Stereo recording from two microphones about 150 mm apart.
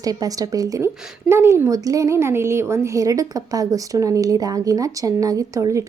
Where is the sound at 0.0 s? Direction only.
25° right (ahead or behind).